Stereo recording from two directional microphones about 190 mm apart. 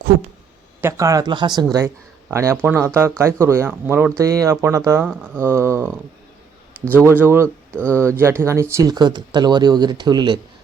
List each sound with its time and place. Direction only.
0.8 s speech: 15° right (ahead or behind)
7.4 s speech: 5° left (ahead or behind)
8.2 s speech: 15° right (ahead or behind)